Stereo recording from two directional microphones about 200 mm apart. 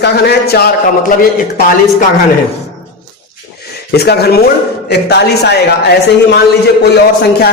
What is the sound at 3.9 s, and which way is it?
A woman's voice, 55° left (ahead or behind).